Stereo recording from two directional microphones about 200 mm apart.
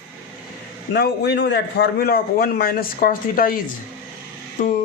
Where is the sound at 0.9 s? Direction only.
55° left (ahead or behind).